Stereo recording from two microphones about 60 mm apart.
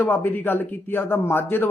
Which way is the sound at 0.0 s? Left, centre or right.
Left.